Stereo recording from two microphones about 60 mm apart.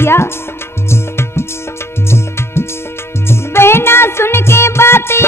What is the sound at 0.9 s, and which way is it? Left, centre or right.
Music, left.